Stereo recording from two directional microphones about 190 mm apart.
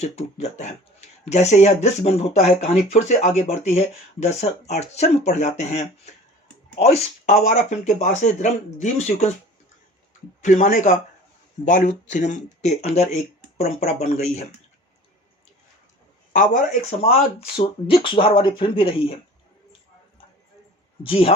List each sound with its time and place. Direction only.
0.0 s speech: 35° left (ahead or behind)
10.4 s speech: 40° left (ahead or behind)
16.3 s speech: 40° left (ahead or behind)
17.6 s speech: 25° left (ahead or behind)
21.1 s speech: 30° left (ahead or behind)